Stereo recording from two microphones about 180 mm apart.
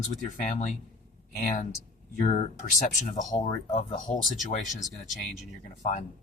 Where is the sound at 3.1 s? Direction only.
45° left (ahead or behind).